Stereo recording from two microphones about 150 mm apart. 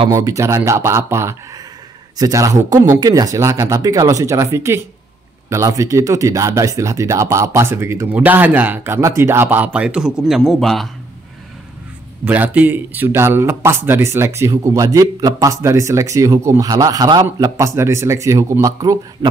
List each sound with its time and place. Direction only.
0.1 s speech: 20° right (ahead or behind); by 10.9 s centre (ahead or behind)
12.3 s speech: 10° right (ahead or behind)